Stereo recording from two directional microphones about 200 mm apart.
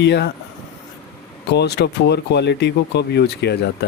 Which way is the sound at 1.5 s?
55° left (ahead or behind).